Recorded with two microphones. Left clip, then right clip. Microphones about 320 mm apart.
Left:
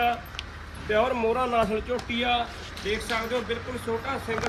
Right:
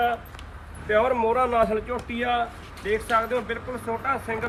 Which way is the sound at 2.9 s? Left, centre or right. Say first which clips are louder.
Right 4 dB; right.